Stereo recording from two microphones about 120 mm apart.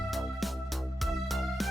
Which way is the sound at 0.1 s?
Centre (ahead or behind).